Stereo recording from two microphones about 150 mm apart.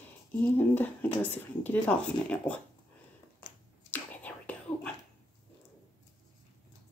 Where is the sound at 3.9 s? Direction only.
10° left (ahead or behind).